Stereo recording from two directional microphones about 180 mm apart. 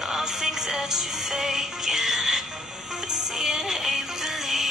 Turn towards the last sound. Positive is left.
turn(degrees=0)  # may be behind; listen again after turning